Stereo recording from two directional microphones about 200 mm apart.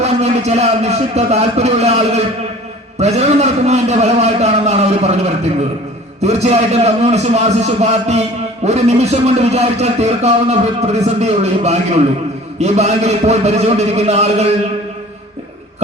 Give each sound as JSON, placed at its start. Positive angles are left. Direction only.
{"t": 0.0, "sound": "a man's voice", "side_deg": -35}